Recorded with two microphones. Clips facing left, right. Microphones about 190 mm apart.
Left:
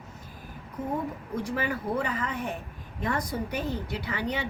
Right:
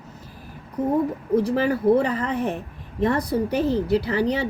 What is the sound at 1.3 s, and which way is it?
A woman's voice, 30° right (ahead or behind).